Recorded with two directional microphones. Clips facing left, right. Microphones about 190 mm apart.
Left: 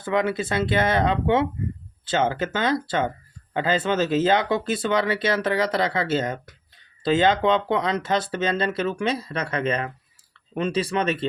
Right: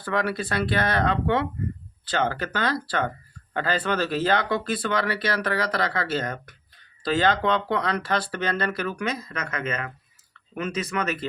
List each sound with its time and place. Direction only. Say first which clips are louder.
0.0 s speech: left 3 dB; 20° left (ahead or behind)